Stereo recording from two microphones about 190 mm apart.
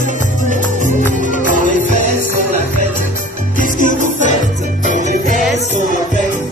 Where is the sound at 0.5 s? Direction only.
40° right (ahead or behind).